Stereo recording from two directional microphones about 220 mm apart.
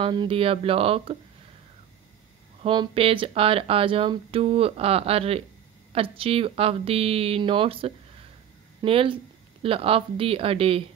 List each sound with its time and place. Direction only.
0.0 s speech: 20° right (ahead or behind)
2.6 s speech: 20° right (ahead or behind)